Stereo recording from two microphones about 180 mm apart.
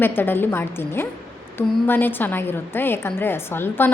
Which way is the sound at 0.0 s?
10° left (ahead or behind).